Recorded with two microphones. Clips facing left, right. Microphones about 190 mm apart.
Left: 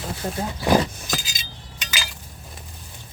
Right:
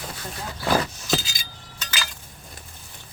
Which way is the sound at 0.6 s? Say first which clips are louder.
Left 4 dB; 20° left (ahead or behind).